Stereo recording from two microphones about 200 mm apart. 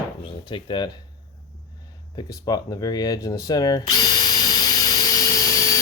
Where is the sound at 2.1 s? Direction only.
20° left (ahead or behind).